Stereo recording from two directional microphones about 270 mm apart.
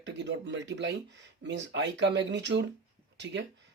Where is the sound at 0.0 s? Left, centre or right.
Right.